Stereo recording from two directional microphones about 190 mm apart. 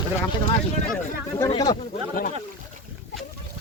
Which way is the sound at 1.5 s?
25° left (ahead or behind).